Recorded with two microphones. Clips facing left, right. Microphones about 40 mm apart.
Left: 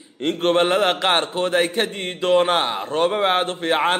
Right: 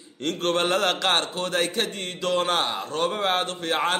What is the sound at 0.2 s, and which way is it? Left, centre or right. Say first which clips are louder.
A man's voice: left 6 dB; left.